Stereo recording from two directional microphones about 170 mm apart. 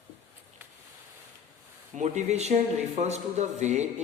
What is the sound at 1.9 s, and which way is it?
Speech, 45° right (ahead or behind).